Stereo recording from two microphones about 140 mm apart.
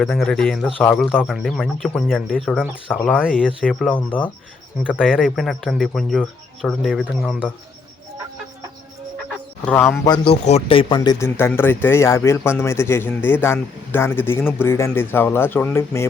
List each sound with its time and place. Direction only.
0.0 s speech: 5° left (ahead or behind)
4.9 s speech: centre (ahead or behind)
9.6 s speech: 10° left (ahead or behind)
10.0 s speech: 30° left (ahead or behind)
10.4 s speech: 45° left (ahead or behind); by 11.3 s 30° left (ahead or behind)
11.3 s speech: 15° left (ahead or behind)